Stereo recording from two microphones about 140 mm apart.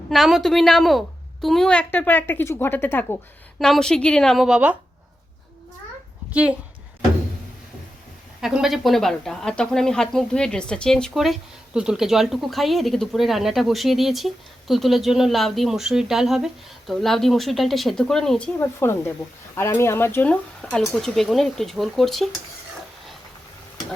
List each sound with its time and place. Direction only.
0.1 s a woman's voice: centre (ahead or behind)
6.3 s a woman's voice: 10° right (ahead or behind)
8.4 s speech: 5° right (ahead or behind)
18.6 s a woman's voice: 15° left (ahead or behind); by 22.3 s centre (ahead or behind)